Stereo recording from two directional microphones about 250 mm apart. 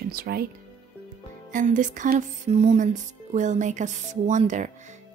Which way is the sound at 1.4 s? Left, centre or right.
Right.